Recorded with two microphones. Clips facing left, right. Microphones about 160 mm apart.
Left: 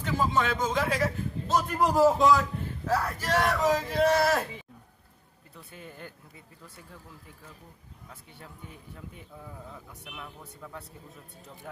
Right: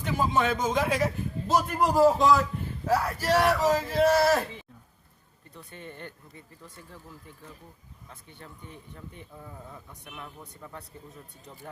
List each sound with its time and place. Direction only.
0.0 s a man's voice: 15° right (ahead or behind)
1.7 s speech: centre (ahead or behind)
5.7 s speech: 5° left (ahead or behind)
8.4 s speech: 5° left (ahead or behind)